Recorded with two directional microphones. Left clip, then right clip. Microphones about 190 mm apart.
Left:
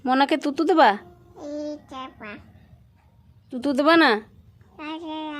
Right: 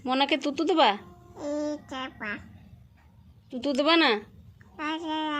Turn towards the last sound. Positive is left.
turn(degrees=10)  # may be behind; listen again after turning